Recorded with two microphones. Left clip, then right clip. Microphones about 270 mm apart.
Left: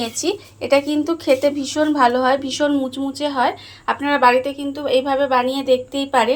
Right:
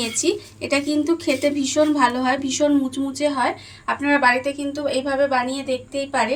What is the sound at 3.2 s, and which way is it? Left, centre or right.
A woman's voice, centre.